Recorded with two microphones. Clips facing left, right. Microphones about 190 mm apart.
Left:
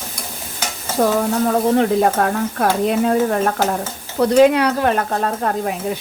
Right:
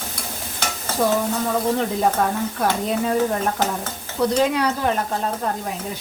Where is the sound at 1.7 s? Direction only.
60° left (ahead or behind).